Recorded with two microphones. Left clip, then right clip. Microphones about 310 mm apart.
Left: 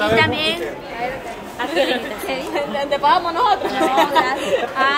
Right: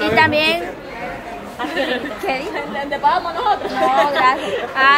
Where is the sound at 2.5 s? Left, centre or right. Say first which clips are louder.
Left 3 dB; left.